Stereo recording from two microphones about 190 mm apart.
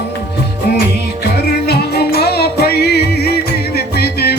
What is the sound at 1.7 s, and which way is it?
Music, 55° left (ahead or behind).